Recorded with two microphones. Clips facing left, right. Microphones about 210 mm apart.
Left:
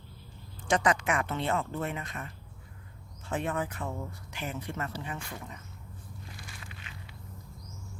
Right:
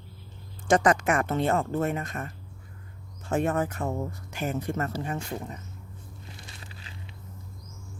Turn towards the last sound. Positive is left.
turn(degrees=-30)  # may be behind; listen again after turning